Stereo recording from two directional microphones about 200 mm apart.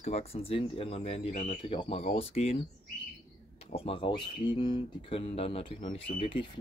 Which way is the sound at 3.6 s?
30° left (ahead or behind).